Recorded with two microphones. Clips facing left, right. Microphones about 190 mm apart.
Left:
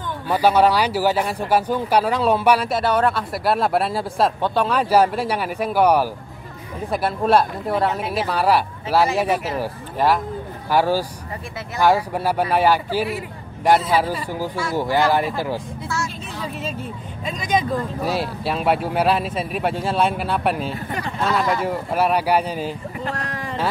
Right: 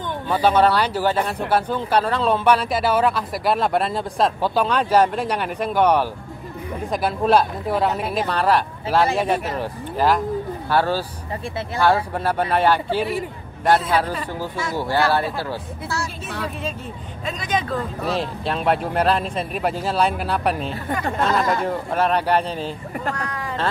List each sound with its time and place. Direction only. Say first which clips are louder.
0.3 s speech: left 1 dB; 10° left (ahead or behind)
2.8 s speech: even; 5° right (ahead or behind); by 15.6 s 15° left (ahead or behind)
17.5 s speech: left 3 dB; 10° left (ahead or behind)
20.9 s speech: right 3 dB; 50° right (ahead or behind)
21.6 s speech: left 1 dB; 5° left (ahead or behind)